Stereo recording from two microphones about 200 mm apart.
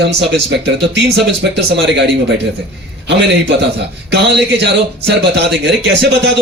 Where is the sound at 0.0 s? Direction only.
60° right (ahead or behind).